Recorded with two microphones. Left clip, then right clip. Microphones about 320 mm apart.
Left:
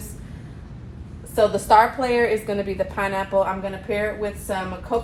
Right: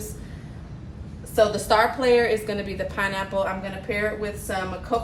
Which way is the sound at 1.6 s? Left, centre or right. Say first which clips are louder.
Left 3 dB; centre.